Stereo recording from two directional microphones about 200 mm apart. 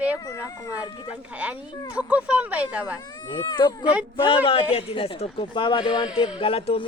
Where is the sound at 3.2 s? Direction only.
20° left (ahead or behind).